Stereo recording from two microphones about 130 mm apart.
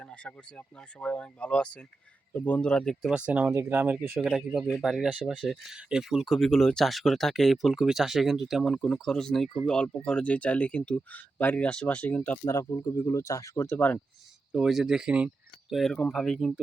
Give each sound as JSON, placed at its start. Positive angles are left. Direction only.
{"t": 0.0, "sound": "speech", "side_deg": 10}
{"t": 3.2, "sound": "speech", "side_deg": -10}
{"t": 12.5, "sound": "speech", "side_deg": 30}
{"t": 14.5, "sound": "speech", "side_deg": -5}
{"t": 15.7, "sound": "speech", "side_deg": 5}